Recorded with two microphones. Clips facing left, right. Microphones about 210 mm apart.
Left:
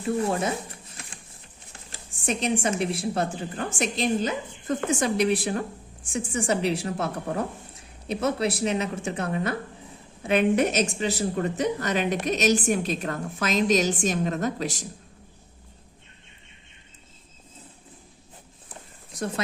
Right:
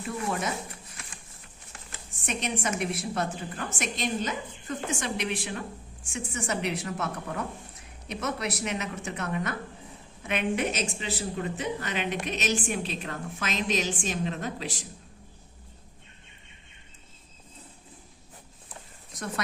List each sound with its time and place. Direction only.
0.0 s speech: 30° left (ahead or behind)
1.7 s speech: 30° left (ahead or behind)